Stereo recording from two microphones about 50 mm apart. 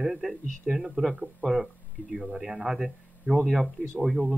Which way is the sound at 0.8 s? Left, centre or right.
Centre.